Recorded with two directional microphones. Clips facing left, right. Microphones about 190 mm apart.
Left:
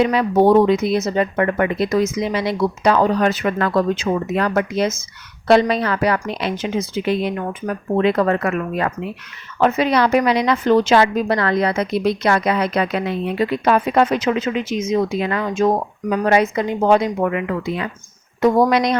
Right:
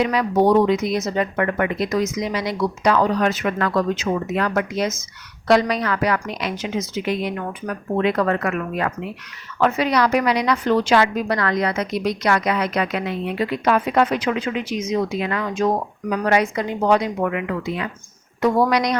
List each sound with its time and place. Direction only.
0.0 s speech: 25° left (ahead or behind)
9.6 s speech: 20° left (ahead or behind)